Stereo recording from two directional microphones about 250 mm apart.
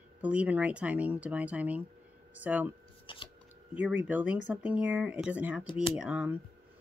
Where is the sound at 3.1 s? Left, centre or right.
Left.